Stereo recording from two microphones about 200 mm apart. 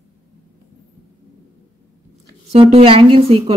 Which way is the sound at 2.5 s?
25° right (ahead or behind).